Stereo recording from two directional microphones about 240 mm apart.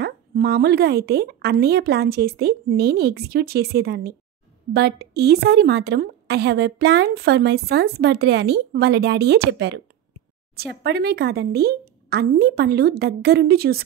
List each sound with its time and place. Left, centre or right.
0.0 s a woman's voice: right